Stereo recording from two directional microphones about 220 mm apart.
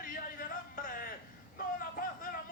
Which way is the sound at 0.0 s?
40° left (ahead or behind).